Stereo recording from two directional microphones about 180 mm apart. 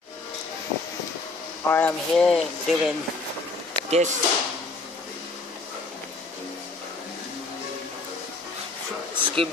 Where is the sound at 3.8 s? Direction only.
40° right (ahead or behind).